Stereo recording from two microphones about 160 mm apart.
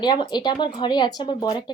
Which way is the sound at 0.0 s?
25° left (ahead or behind).